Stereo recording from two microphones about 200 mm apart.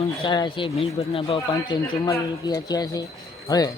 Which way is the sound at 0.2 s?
25° left (ahead or behind).